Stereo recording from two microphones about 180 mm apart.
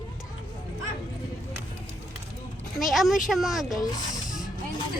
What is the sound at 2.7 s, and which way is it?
Speech, centre (ahead or behind).